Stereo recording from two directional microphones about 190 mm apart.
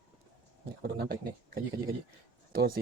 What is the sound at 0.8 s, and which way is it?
Speech, 55° right (ahead or behind).